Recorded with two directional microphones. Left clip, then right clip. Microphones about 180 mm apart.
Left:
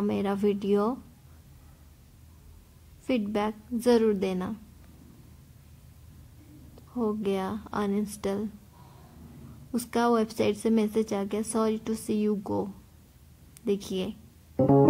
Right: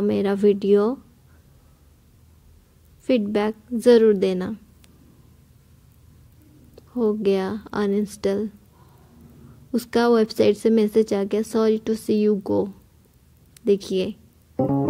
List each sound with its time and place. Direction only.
0.0 s a woman's voice: 20° right (ahead or behind)
3.1 s a woman's voice: 20° right (ahead or behind)
6.9 s a woman's voice: 20° right (ahead or behind)
9.7 s a woman's voice: 20° right (ahead or behind)
14.6 s keyboard: centre (ahead or behind)